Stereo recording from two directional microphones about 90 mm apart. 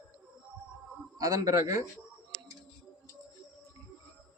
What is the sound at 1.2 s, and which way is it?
Speech, 40° right (ahead or behind).